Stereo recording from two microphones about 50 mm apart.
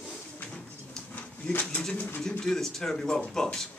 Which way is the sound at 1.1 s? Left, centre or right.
Left.